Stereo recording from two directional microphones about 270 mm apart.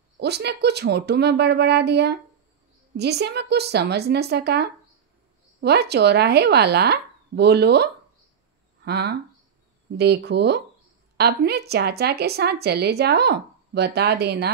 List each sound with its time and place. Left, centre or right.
0.2 s a woman's voice: right